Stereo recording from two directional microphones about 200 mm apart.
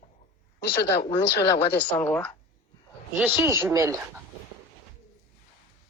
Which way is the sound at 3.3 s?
10° right (ahead or behind).